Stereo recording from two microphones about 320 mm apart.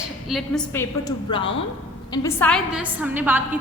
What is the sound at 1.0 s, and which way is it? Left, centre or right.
A woman's voice, centre.